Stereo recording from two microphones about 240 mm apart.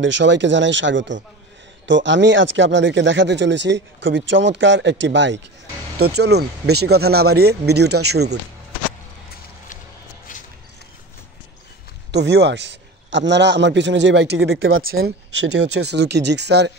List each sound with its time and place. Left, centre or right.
0.0 s speech: right
10.3 s a sound: left
12.1 s speech: right